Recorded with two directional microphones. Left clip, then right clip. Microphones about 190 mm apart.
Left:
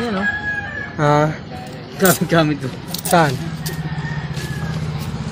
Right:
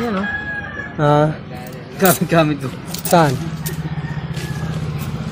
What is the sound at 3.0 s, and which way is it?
Speech, 35° right (ahead or behind).